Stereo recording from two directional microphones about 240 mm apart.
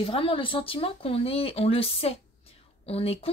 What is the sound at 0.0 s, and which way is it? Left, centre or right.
Speech, left.